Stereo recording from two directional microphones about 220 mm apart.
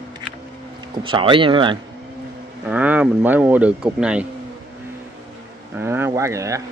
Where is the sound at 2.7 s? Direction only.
5° right (ahead or behind).